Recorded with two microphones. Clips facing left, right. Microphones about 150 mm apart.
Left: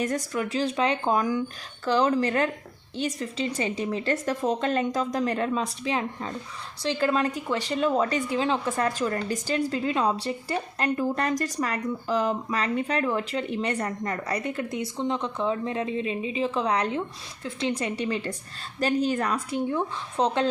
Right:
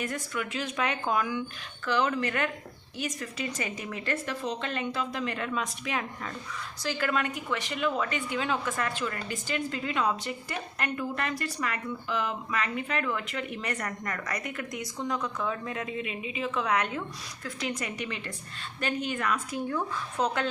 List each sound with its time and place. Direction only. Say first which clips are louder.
0.0 s a woman's voice: left 6 dB; 35° left (ahead or behind)